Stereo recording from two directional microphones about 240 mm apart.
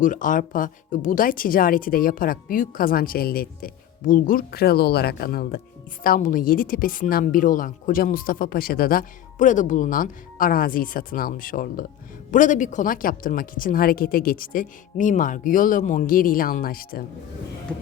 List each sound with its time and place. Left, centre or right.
0.0 s a woman's voice: left